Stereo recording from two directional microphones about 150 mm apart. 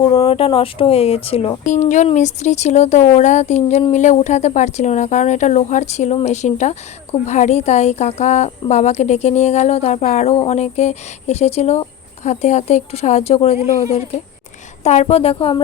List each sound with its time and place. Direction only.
0.0 s speech: 35° left (ahead or behind)
14.8 s speech: 45° left (ahead or behind)